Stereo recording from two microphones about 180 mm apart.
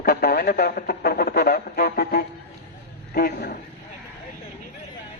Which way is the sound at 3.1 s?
55° left (ahead or behind).